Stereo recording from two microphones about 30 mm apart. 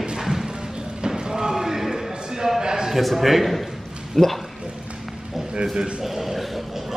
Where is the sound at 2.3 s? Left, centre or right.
Centre.